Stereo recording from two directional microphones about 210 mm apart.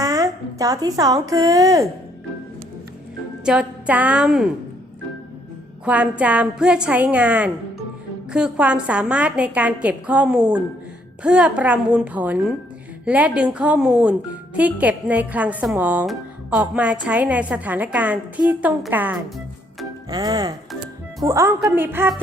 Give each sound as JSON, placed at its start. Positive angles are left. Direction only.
{"t": 0.0, "sound": "a woman's voice", "side_deg": -15}
{"t": 3.4, "sound": "a woman's voice", "side_deg": -5}
{"t": 5.8, "sound": "a woman's voice", "side_deg": -5}